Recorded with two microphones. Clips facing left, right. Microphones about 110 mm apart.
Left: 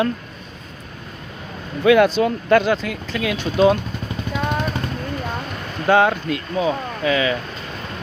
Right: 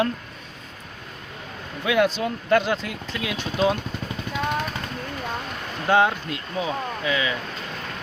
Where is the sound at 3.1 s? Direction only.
70° left (ahead or behind).